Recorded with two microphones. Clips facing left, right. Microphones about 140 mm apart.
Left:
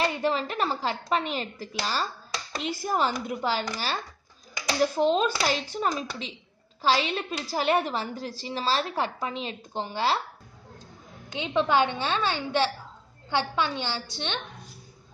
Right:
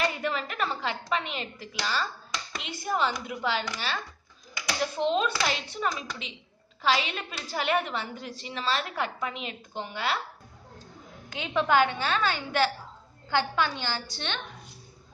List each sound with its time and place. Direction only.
0.0 s a woman's voice: 30° left (ahead or behind)
11.2 s a woman's voice: 20° left (ahead or behind)